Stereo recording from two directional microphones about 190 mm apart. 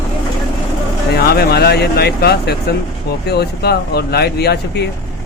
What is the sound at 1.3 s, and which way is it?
Speech, 55° left (ahead or behind).